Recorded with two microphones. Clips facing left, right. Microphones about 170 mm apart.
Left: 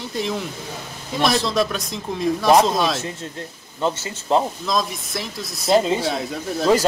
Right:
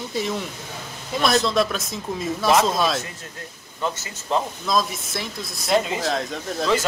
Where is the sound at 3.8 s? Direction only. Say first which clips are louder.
Left 4 dB; 30° left (ahead or behind).